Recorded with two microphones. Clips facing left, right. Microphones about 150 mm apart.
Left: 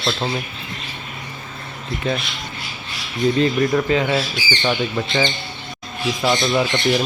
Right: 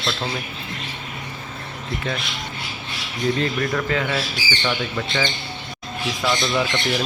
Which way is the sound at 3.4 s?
20° left (ahead or behind).